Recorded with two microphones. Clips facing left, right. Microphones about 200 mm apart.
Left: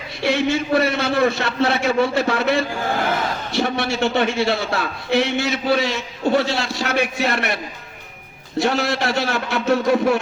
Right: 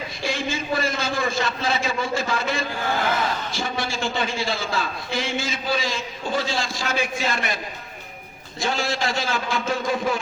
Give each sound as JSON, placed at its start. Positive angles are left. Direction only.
{"t": 0.2, "sound": "a man's voice", "side_deg": 65}